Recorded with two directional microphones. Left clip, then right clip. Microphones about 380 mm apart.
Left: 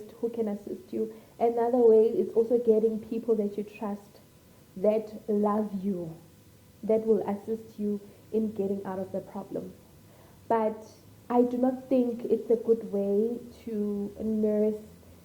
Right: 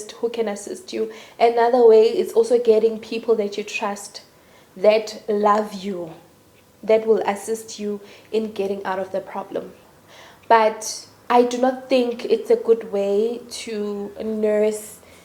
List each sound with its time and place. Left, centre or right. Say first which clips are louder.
0.3 s a woman's voice: right 8 dB; centre
2.3 s a woman's voice: right 9 dB; centre
8.8 s a woman's voice: right 10 dB; centre
13.1 s speech: right 6 dB; right
13.5 s a woman's voice: right 7 dB; centre
13.8 s a woman's voice: right 6 dB; centre